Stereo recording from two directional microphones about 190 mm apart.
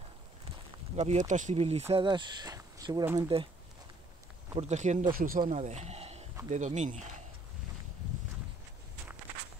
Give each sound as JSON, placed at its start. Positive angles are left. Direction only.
{"t": 0.9, "sound": "speech", "side_deg": -35}
{"t": 4.6, "sound": "speech", "side_deg": -35}
{"t": 5.5, "sound": "speech", "side_deg": -35}